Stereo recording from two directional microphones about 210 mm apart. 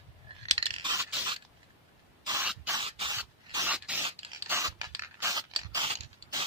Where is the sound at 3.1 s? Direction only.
15° right (ahead or behind).